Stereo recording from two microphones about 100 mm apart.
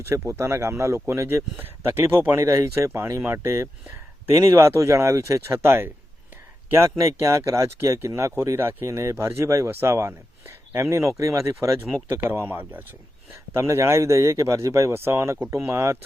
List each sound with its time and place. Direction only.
0.0 s speech: 25° right (ahead or behind)